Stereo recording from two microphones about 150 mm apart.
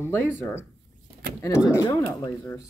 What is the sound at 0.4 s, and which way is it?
Speech, 15° left (ahead or behind).